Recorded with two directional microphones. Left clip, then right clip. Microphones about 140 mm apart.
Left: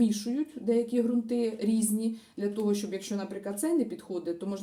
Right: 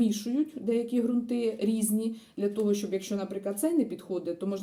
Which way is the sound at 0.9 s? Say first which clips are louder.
Left 1 dB; 5° right (ahead or behind).